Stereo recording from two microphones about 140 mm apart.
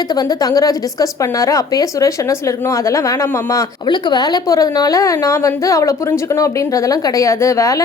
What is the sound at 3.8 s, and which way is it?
A woman's voice, 30° left (ahead or behind).